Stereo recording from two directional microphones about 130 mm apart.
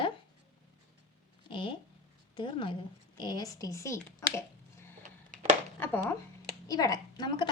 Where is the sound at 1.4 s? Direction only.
40° left (ahead or behind); by 4.0 s 20° left (ahead or behind).